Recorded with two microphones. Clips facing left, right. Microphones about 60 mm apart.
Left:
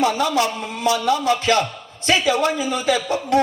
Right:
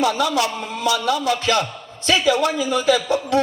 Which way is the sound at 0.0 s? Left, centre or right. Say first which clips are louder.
Left 1 dB; left.